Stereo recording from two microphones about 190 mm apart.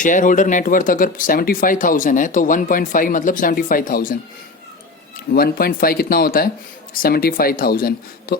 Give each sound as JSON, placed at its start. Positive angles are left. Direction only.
{"t": 0.0, "sound": "speech", "side_deg": 45}
{"t": 5.3, "sound": "speech", "side_deg": 55}